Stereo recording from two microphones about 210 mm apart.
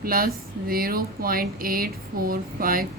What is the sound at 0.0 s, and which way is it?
Speech, 45° right (ahead or behind).